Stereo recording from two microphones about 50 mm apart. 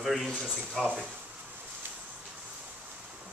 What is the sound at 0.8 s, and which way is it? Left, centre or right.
Speech, centre.